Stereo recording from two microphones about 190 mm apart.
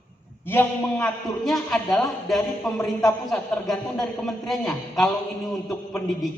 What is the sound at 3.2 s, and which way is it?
A man's voice, centre (ahead or behind).